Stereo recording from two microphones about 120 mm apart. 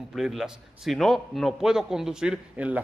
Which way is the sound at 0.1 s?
Centre (ahead or behind).